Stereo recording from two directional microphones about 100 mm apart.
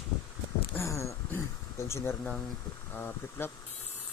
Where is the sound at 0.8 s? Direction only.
30° left (ahead or behind).